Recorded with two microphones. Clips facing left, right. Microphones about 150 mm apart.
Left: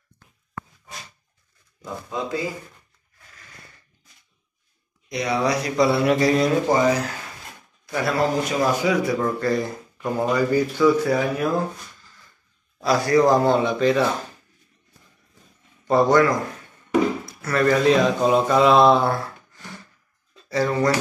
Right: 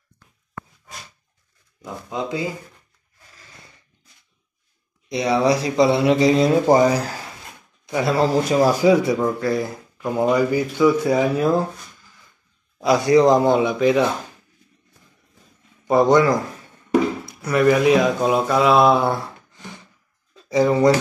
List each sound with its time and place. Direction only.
2.0 s speech: 20° right (ahead or behind)
5.1 s speech: 25° right (ahead or behind)
6.7 s speech: 35° right (ahead or behind)
7.8 s speech: 20° right (ahead or behind)
9.2 s a man's voice: 10° right (ahead or behind); by 11.6 s 30° right (ahead or behind)
12.0 s a sound: 15° right (ahead or behind)
12.7 s a man's voice: 15° right (ahead or behind)
15.9 s a man's voice: 20° right (ahead or behind)
17.3 s a man's voice: 15° right (ahead or behind)